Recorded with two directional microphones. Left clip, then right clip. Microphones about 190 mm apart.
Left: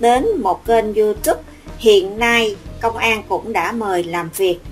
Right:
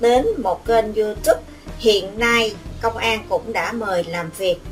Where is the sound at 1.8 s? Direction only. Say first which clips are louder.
Left 4 dB; 50° left (ahead or behind).